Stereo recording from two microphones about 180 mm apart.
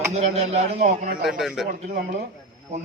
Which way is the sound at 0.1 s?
35° right (ahead or behind).